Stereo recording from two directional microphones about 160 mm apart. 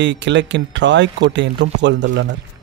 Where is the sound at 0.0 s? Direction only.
90° right.